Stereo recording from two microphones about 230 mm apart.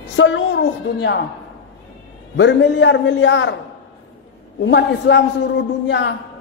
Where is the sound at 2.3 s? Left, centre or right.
Left.